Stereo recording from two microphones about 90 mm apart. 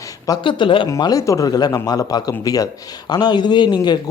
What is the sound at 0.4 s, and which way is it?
Speech, 70° left (ahead or behind).